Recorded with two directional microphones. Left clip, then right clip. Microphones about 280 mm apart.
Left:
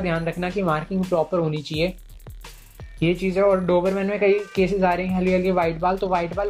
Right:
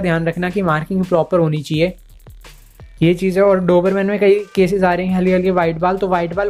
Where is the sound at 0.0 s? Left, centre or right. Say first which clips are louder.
Right 6 dB; right.